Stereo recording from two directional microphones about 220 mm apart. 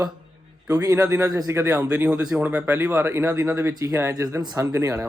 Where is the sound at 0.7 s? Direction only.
15° right (ahead or behind).